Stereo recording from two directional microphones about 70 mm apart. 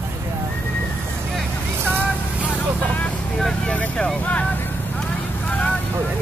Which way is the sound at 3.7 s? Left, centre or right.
Centre.